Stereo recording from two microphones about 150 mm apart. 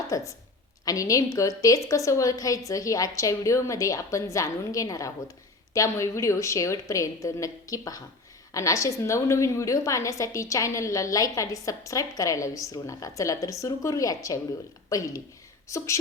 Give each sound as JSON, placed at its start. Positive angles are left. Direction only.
{"t": 0.1, "sound": "a woman's voice", "side_deg": 20}